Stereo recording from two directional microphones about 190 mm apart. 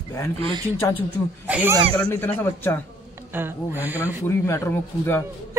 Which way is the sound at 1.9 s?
10° left (ahead or behind).